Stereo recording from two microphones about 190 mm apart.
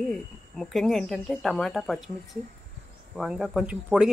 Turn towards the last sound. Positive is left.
turn(degrees=-5)  # may be behind; listen again after turning